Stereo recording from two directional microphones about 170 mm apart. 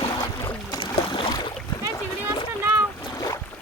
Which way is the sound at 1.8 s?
15° right (ahead or behind).